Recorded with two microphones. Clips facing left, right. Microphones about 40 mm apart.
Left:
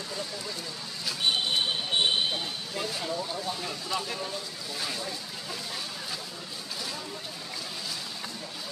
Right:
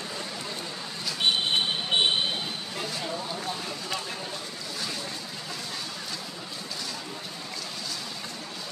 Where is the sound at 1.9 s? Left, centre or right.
Right.